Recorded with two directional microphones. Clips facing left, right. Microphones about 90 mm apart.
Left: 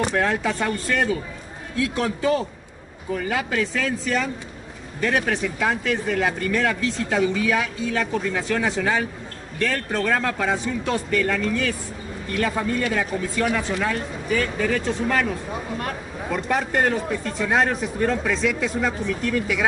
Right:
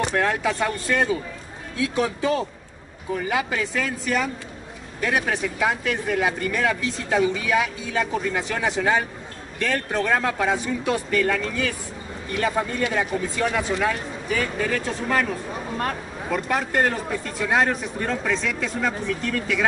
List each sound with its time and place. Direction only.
0.1 s speech: 5° right (ahead or behind)
3.2 s speech: 10° right (ahead or behind)
13.7 s speech: 5° right (ahead or behind)
16.3 s speech: centre (ahead or behind)